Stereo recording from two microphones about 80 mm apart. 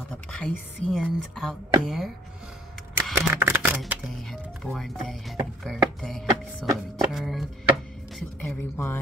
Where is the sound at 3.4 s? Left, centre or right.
Right.